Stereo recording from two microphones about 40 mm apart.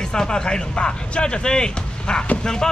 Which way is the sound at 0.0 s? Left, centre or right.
Centre.